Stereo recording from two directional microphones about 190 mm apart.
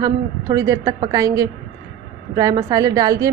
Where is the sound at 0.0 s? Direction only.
20° right (ahead or behind).